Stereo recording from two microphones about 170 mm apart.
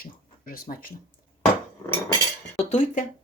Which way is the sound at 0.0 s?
55° left (ahead or behind).